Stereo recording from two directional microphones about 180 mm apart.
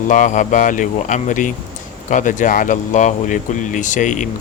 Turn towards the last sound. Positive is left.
turn(degrees=45)  # may be behind; listen again after turning